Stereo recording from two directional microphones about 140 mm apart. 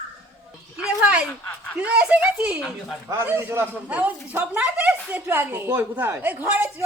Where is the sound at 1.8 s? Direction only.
10° right (ahead or behind).